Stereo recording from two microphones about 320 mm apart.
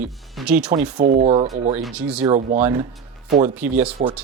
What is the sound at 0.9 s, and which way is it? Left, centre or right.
Speech, right.